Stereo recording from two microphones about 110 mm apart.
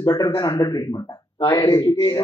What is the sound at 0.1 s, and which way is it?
Speech, 40° left (ahead or behind).